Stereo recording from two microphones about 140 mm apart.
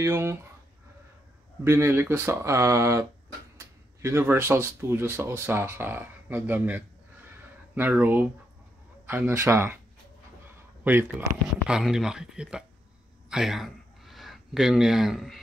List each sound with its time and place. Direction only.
0.0 s speech: 20° right (ahead or behind)
1.6 s speech: 20° right (ahead or behind)
10.8 s speech: 15° right (ahead or behind)